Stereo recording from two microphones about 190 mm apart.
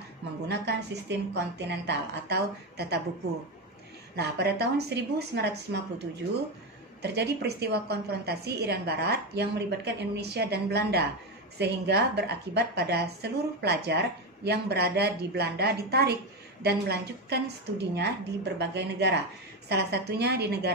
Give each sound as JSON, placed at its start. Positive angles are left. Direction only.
{"t": 0.5, "sound": "a woman's voice", "side_deg": -60}
{"t": 4.1, "sound": "a woman's voice", "side_deg": -60}